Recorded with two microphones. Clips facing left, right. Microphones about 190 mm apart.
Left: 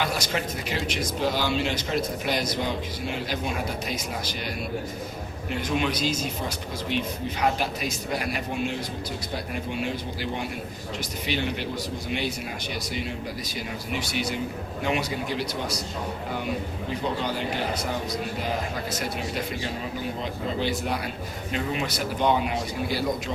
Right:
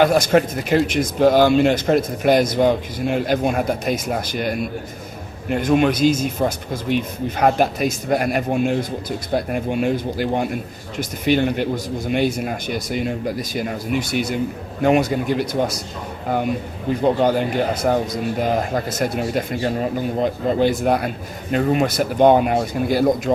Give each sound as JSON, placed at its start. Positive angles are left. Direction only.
{"t": 0.0, "sound": "a man's voice", "side_deg": -50}
{"t": 17.0, "sound": "a man's voice", "side_deg": -50}